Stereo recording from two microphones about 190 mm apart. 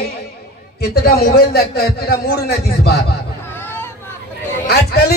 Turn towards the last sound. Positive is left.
turn(degrees=55)  # may be behind; listen again after turning